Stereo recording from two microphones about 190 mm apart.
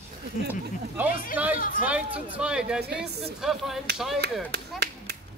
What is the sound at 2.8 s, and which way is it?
Speech, 60° right (ahead or behind).